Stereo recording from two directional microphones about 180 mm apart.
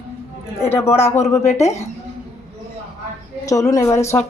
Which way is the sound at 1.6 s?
35° left (ahead or behind).